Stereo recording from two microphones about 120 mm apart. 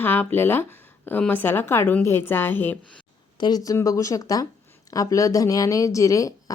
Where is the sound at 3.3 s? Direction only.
35° left (ahead or behind).